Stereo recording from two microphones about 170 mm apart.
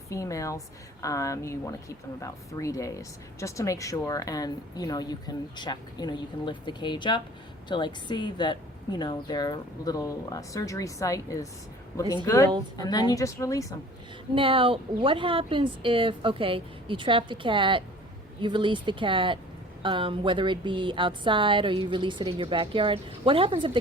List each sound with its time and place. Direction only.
0.1 s a woman's voice: 20° left (ahead or behind)
14.3 s a woman's voice: 30° right (ahead or behind)